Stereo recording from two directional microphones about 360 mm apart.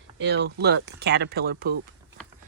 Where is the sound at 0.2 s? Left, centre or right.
Right.